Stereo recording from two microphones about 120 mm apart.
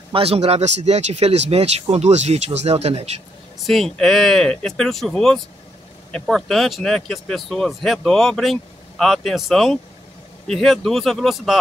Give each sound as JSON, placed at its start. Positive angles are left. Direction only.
{"t": 0.1, "sound": "speech", "side_deg": -55}
{"t": 3.6, "sound": "speech", "side_deg": 0}